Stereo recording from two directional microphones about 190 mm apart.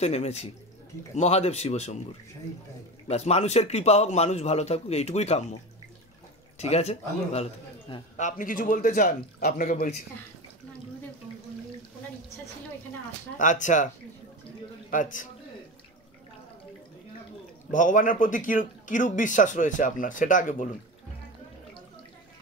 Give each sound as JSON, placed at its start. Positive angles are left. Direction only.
{"t": 0.0, "sound": "a man's voice", "side_deg": 35}
{"t": 3.1, "sound": "a man's voice", "side_deg": 35}
{"t": 6.6, "sound": "a man's voice", "side_deg": 35}
{"t": 13.4, "sound": "a man's voice", "side_deg": 40}
{"t": 14.9, "sound": "a man's voice", "side_deg": 40}
{"t": 17.6, "sound": "a man's voice", "side_deg": 40}